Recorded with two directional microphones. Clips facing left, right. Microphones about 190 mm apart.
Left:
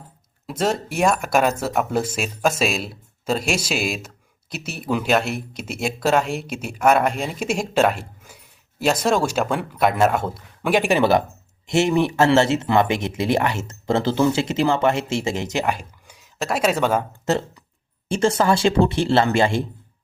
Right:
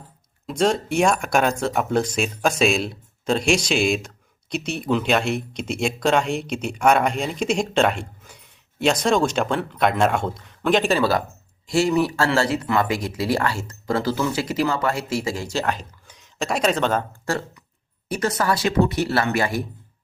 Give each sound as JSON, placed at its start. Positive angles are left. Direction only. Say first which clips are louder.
{"t": 0.4, "sound": "speech", "louder": "right 2 dB", "side_deg": 5}
{"t": 17.2, "sound": "speech", "louder": "left 4 dB", "side_deg": 20}